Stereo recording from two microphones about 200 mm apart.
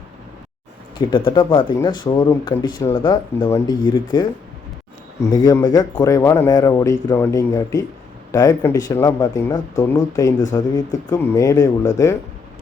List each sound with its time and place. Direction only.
0.9 s speech: 25° left (ahead or behind)